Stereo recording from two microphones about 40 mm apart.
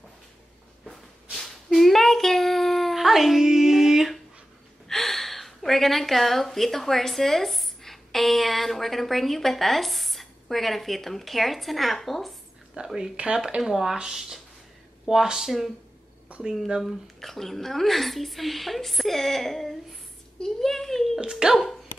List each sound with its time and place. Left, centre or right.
0.8 s female singing: centre
4.8 s a woman's voice: centre
12.7 s a woman's voice: centre
13.7 s a woman's voice: centre
16.3 s a sound: right
16.8 s a child's voice: centre
21.2 s speech: centre